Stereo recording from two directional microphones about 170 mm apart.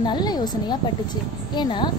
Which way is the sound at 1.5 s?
25° left (ahead or behind).